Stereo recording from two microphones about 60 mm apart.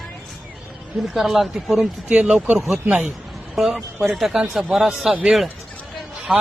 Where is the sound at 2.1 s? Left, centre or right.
Centre.